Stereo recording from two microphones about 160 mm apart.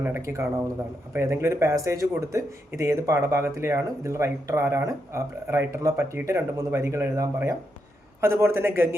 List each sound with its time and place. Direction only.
0.0 s speech: 15° right (ahead or behind)